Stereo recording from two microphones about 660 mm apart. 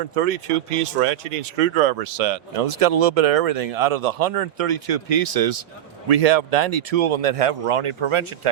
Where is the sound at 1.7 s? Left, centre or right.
Right.